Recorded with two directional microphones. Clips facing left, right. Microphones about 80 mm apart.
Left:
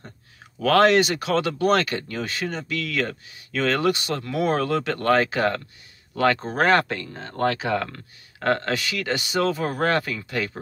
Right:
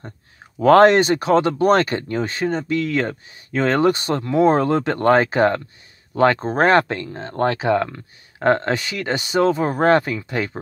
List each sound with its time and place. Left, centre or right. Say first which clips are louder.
0.6 s speech: right 6 dB; right